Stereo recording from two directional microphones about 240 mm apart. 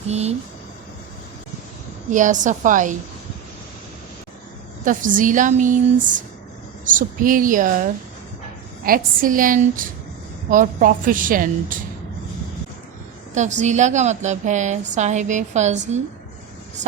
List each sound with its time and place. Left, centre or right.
0.1 s a woman's voice: right
2.0 s a woman's voice: right
4.9 s a woman's voice: right
8.8 s a woman's voice: right
13.3 s a woman's voice: right